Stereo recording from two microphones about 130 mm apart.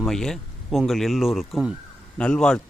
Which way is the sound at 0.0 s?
5° left (ahead or behind).